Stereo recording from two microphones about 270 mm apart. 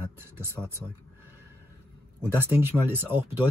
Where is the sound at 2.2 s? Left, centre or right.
Centre.